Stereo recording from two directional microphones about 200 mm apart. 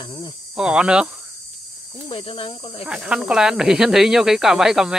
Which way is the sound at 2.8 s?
Centre (ahead or behind).